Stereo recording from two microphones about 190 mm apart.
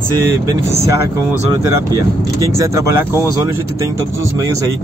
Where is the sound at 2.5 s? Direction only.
15° right (ahead or behind).